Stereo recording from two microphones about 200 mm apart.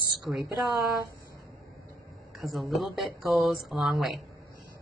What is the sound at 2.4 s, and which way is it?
A woman's voice, centre (ahead or behind).